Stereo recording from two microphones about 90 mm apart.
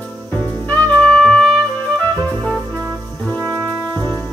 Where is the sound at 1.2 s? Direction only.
5° left (ahead or behind).